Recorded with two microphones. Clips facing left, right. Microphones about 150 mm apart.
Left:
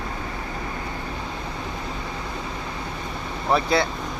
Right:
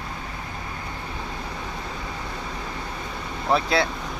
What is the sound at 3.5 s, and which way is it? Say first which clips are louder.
Speech: left 1 dB; centre (ahead or behind).